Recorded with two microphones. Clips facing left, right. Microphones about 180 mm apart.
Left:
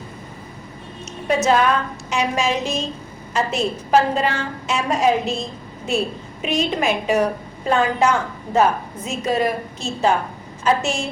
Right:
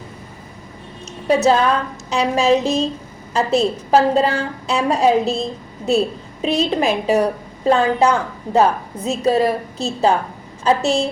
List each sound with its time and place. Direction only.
1.4 s a woman's voice: 30° right (ahead or behind)